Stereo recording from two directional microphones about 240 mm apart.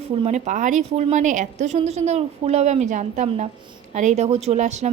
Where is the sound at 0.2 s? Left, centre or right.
Right.